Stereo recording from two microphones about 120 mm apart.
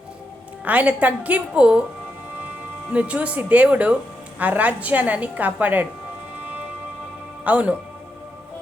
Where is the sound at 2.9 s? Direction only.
10° right (ahead or behind).